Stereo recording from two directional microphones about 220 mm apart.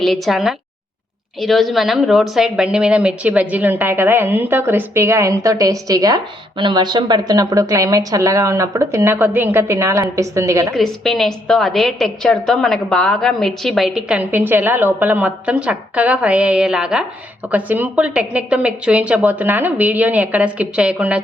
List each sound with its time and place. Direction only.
0.0 s a woman's voice: centre (ahead or behind)
10.8 s a woman's voice: centre (ahead or behind)